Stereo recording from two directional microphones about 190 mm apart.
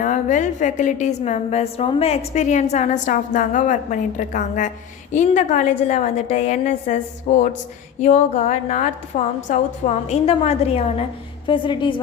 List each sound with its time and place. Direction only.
0.0 s a woman's voice: 40° left (ahead or behind)